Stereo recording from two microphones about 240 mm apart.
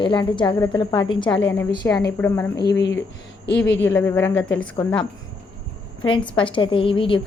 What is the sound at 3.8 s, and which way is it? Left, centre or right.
A woman's voice, centre.